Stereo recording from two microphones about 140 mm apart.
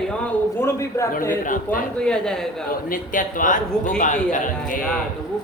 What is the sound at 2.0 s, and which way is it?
Speech, 5° left (ahead or behind).